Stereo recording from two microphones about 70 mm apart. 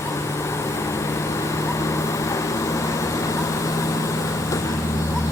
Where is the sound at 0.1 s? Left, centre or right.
Left.